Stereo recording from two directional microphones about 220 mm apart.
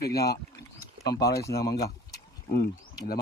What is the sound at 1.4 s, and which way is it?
Speech, 15° left (ahead or behind).